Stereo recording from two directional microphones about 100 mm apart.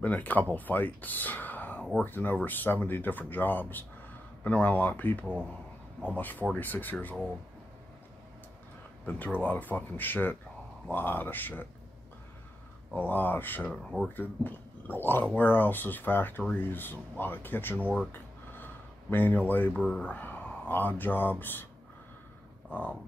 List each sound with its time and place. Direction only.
0.0 s speech: 15° left (ahead or behind)
5.2 s speech: 15° right (ahead or behind)
6.1 s speech: 15° left (ahead or behind)
9.0 s speech: 15° left (ahead or behind)
12.9 s speech: 15° left (ahead or behind)
13.7 s speech: 5° right (ahead or behind)
14.0 s speech: 20° left (ahead or behind)
18.1 s a sound: 20° left (ahead or behind)
19.7 s speech: 5° left (ahead or behind)